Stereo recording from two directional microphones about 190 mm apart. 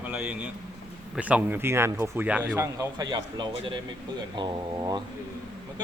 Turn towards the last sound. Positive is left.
turn(degrees=-20)  # may be behind; listen again after turning